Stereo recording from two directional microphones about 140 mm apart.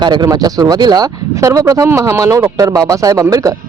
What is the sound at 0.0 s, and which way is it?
Speech, 30° right (ahead or behind).